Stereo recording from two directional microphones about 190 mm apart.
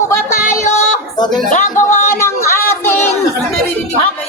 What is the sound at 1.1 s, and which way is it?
Speech, 25° left (ahead or behind).